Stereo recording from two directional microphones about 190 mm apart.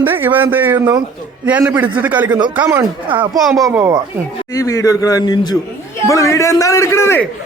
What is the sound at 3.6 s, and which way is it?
Speech, 15° right (ahead or behind).